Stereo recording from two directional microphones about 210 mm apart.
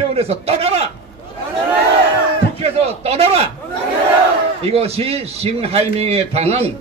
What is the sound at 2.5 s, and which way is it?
Speech, 30° right (ahead or behind).